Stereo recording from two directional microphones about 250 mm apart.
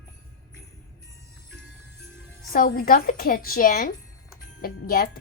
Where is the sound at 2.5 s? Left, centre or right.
Left.